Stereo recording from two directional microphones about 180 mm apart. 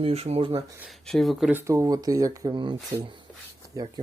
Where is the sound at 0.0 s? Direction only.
35° right (ahead or behind).